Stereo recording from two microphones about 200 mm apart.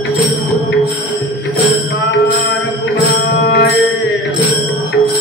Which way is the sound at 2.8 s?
60° left (ahead or behind).